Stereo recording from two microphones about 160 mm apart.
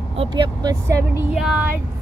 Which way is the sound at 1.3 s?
5° right (ahead or behind).